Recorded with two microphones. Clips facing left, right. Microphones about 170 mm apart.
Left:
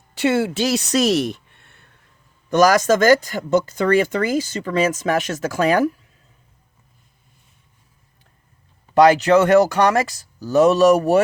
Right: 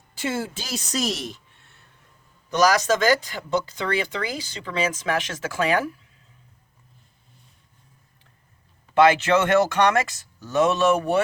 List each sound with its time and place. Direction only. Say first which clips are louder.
0.1 s speech: left 9 dB; 70° left (ahead or behind)
2.5 s speech: left 5 dB; 50° left (ahead or behind)
9.0 s speech: left 5 dB; 40° left (ahead or behind)